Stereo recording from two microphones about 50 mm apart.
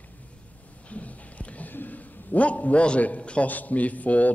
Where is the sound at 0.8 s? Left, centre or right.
Left.